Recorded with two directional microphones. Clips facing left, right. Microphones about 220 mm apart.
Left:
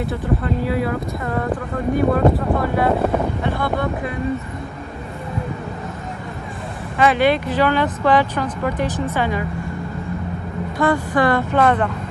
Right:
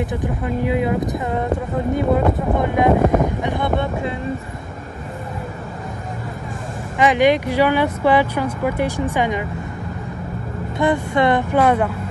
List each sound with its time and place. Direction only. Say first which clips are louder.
0.0 s speech: left 1 dB; 15° right (ahead or behind)
7.0 s speech: right 1 dB; 15° right (ahead or behind)
10.8 s speech: even; 20° right (ahead or behind)
11.5 s speech: right 1 dB; 10° right (ahead or behind)